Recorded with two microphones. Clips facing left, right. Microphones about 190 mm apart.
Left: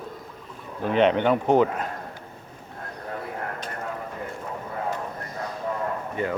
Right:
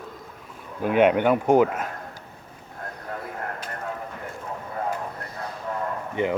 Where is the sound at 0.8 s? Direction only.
10° right (ahead or behind).